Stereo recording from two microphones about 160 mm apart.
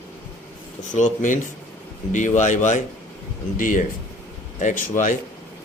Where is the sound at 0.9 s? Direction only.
50° left (ahead or behind).